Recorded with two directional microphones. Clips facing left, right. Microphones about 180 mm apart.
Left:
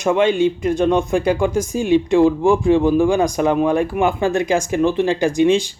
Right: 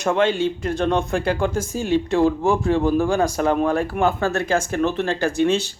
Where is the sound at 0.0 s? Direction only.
15° left (ahead or behind).